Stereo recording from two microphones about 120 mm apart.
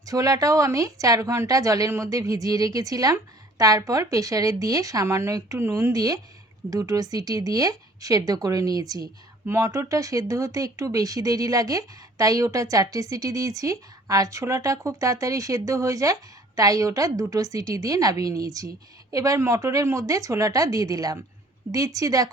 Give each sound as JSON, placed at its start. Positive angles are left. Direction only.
{"t": 0.0, "sound": "speech", "side_deg": -30}